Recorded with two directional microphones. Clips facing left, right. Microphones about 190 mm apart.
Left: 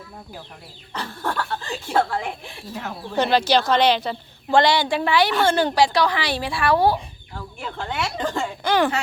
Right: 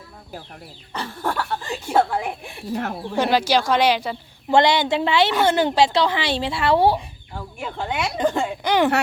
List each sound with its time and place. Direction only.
0.9 s speech: 10° right (ahead or behind)
4.5 s a woman's voice: 20° right (ahead or behind)
7.3 s speech: 15° right (ahead or behind)